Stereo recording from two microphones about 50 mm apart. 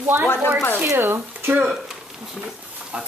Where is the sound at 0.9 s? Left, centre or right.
Right.